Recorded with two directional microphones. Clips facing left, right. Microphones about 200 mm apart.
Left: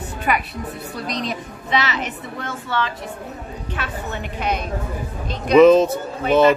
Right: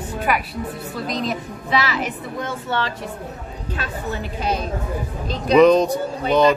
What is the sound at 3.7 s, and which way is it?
Speech, 35° right (ahead or behind).